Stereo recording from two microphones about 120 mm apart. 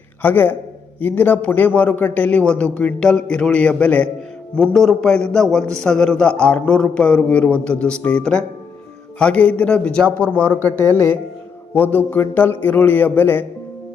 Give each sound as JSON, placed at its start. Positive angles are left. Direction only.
{"t": 0.2, "sound": "a man's voice", "side_deg": 15}
{"t": 11.7, "sound": "a man's voice", "side_deg": 15}